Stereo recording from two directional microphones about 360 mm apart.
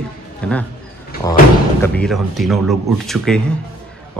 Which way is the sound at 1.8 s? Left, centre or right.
Centre.